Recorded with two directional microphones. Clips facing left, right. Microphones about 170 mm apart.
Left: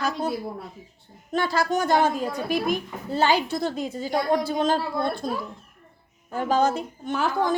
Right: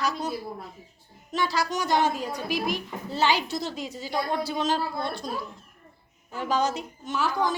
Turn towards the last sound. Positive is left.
turn(degrees=55)  # may be behind; listen again after turning